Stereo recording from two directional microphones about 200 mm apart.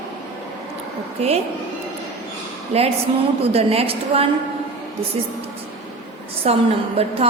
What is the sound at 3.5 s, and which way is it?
Speech, 30° right (ahead or behind).